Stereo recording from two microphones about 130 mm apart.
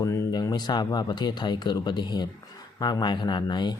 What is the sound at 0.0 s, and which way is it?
Speech, 25° left (ahead or behind).